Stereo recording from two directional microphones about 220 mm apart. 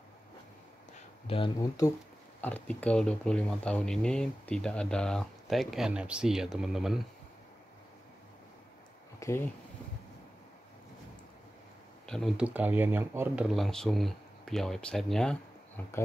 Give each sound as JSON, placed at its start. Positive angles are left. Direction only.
{"t": 1.2, "sound": "speech", "side_deg": 25}
{"t": 2.4, "sound": "speech", "side_deg": 5}
{"t": 9.2, "sound": "speech", "side_deg": 15}
{"t": 12.1, "sound": "speech", "side_deg": 0}
{"t": 13.5, "sound": "speech", "side_deg": 0}